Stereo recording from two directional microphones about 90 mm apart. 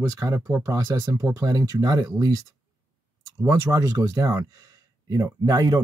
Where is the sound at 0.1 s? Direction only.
35° right (ahead or behind).